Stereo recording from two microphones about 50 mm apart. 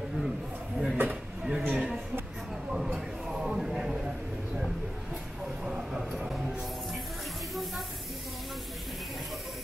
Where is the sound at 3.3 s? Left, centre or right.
Centre.